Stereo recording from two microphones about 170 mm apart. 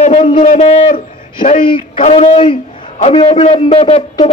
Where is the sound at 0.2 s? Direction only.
30° left (ahead or behind).